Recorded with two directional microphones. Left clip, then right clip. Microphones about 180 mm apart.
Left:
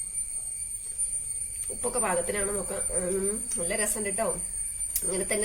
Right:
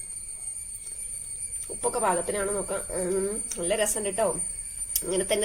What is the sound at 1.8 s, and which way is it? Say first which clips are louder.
Speech: right 3 dB; 35° right (ahead or behind).